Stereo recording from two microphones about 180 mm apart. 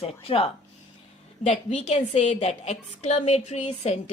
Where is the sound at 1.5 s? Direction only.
40° left (ahead or behind).